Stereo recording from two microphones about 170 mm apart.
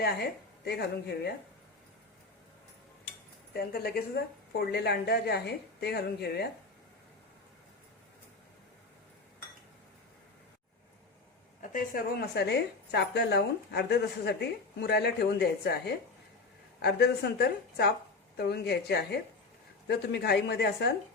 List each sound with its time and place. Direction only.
0.0 s a woman's voice: 70° left (ahead or behind)
3.5 s a woman's voice: 65° left (ahead or behind)
11.6 s a woman's voice: 55° left (ahead or behind); by 20.9 s 80° left